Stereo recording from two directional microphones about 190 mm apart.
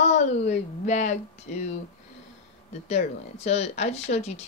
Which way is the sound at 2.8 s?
35° left (ahead or behind).